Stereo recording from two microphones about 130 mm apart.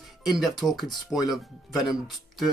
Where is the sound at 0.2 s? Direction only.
Centre (ahead or behind).